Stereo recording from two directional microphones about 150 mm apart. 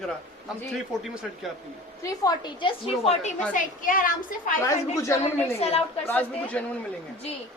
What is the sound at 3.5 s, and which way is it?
A woman's voice, 65° left (ahead or behind).